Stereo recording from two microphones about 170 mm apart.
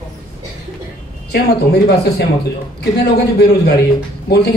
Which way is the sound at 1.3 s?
75° left (ahead or behind).